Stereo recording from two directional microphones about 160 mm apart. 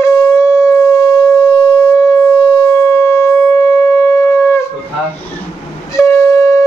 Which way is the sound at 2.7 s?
15° left (ahead or behind).